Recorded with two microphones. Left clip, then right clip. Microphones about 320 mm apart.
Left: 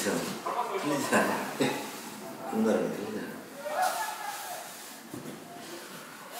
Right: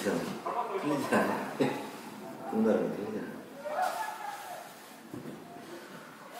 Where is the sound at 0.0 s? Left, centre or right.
Centre.